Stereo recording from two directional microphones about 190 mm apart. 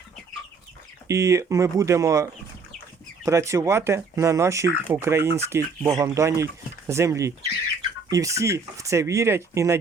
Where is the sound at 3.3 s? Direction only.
15° right (ahead or behind).